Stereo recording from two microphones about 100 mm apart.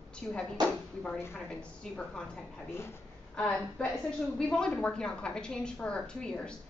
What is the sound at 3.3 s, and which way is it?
A woman's voice, 10° left (ahead or behind).